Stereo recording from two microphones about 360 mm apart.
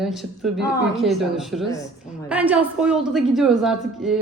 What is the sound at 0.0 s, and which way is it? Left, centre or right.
A woman's voice, centre.